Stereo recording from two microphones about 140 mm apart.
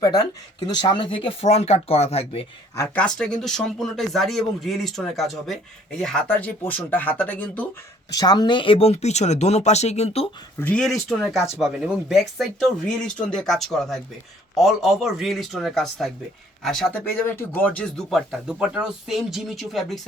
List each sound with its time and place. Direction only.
0.0 s speech: 30° left (ahead or behind); by 2.5 s 45° left (ahead or behind)
2.9 s speech: 5° left (ahead or behind)
8.1 s speech: 30° left (ahead or behind); by 10.2 s 50° left (ahead or behind)
10.6 s speech: 10° left (ahead or behind)
16.9 s speech: 15° left (ahead or behind)